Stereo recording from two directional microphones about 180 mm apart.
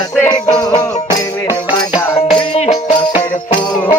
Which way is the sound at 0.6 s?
20° left (ahead or behind).